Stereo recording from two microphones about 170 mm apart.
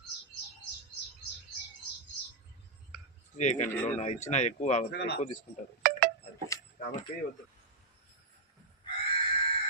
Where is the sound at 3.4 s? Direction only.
45° left (ahead or behind).